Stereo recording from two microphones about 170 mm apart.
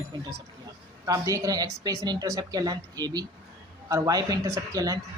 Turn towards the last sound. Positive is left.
turn(degrees=-20)  # may be behind; listen again after turning